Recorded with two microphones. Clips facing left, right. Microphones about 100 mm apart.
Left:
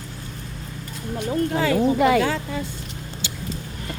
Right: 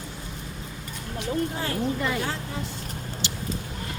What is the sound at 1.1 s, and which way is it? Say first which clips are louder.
Speech: left 5 dB; 55° left (ahead or behind).